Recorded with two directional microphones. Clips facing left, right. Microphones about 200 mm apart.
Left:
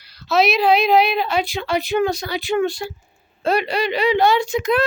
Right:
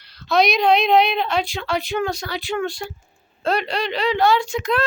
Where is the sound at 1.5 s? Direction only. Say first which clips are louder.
Left 3 dB; 15° left (ahead or behind).